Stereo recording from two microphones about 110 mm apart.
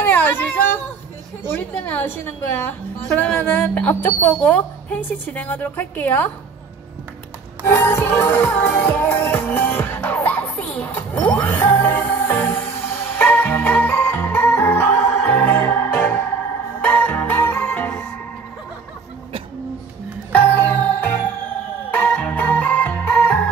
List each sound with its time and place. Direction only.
0.0 s a sound: 15° left (ahead or behind)
1.5 s speech: 20° left (ahead or behind)
7.6 s music: 20° left (ahead or behind)
20.3 s music: 15° left (ahead or behind)